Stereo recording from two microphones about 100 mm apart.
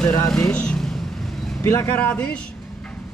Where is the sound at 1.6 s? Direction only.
25° left (ahead or behind).